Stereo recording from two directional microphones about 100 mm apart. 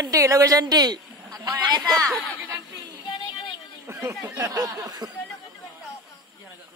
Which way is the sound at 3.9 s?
25° right (ahead or behind).